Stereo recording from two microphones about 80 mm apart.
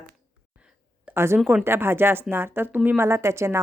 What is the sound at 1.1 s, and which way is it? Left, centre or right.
A woman's voice, right.